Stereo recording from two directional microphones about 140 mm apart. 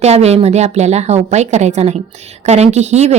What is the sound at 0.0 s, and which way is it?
Speech, 50° right (ahead or behind).